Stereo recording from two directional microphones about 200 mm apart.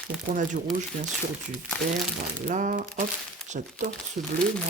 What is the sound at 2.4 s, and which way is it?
Speech, 40° right (ahead or behind).